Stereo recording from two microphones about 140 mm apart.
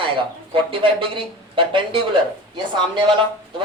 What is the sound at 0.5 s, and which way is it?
Speech, 40° right (ahead or behind).